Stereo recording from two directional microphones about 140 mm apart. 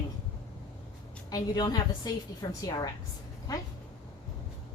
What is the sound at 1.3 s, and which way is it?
A woman's voice, 30° left (ahead or behind).